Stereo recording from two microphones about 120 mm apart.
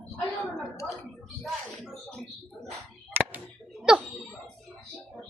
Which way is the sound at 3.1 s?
15° right (ahead or behind).